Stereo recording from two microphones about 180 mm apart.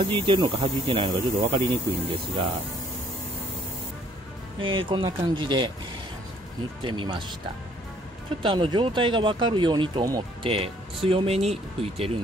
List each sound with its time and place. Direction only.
0.0 s speech: 30° right (ahead or behind)
4.6 s speech: 30° right (ahead or behind)
6.8 s speech: 25° right (ahead or behind)
8.4 s speech: 25° right (ahead or behind)